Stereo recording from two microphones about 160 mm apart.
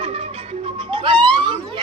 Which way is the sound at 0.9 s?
30° right (ahead or behind).